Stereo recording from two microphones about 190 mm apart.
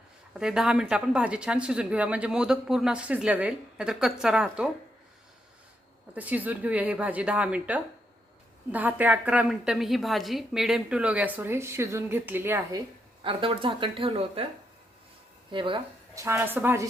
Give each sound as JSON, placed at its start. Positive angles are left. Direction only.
{"t": 0.3, "sound": "speech", "side_deg": -5}
{"t": 6.1, "sound": "a woman's voice", "side_deg": -10}
{"t": 13.2, "sound": "speech", "side_deg": -30}
{"t": 15.5, "sound": "speech", "side_deg": -25}
{"t": 16.2, "sound": "a woman's voice", "side_deg": -15}